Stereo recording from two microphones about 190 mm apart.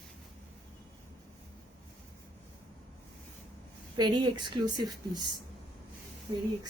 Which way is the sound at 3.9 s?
25° right (ahead or behind).